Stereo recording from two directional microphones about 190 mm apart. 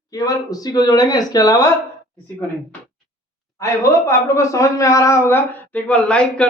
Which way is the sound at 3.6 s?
15° left (ahead or behind).